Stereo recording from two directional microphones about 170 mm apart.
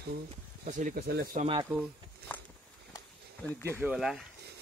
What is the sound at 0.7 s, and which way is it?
Speech, 50° right (ahead or behind).